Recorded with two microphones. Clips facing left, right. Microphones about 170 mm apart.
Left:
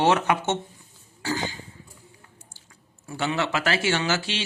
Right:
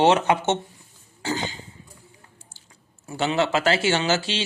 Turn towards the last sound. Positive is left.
turn(degrees=-30)  # may be behind; listen again after turning